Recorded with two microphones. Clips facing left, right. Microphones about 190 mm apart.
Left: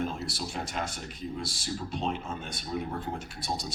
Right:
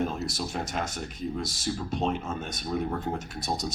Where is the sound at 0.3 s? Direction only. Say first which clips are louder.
Right 3 dB; 45° right (ahead or behind).